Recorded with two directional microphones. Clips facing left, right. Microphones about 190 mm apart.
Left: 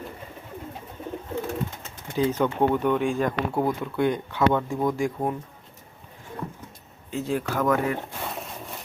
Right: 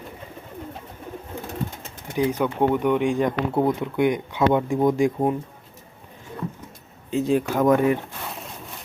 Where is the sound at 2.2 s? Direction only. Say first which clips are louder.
Right 1 dB; 10° right (ahead or behind).